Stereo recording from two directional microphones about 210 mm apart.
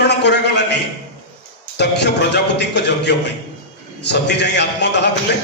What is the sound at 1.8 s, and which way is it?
A man's voice, 55° left (ahead or behind).